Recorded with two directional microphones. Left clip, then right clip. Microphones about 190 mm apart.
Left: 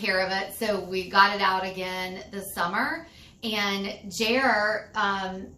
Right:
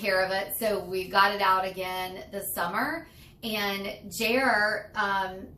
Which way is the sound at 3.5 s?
15° left (ahead or behind).